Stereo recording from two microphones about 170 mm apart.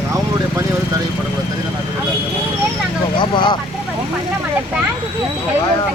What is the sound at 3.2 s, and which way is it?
Speech, 25° left (ahead or behind).